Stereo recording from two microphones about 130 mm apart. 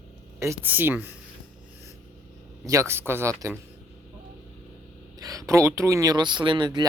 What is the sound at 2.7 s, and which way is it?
Speech, 20° right (ahead or behind).